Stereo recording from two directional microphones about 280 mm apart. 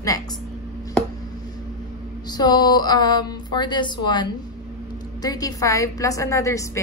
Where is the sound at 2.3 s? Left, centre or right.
Centre.